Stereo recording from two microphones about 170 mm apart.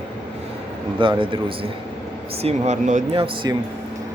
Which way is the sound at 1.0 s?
30° right (ahead or behind).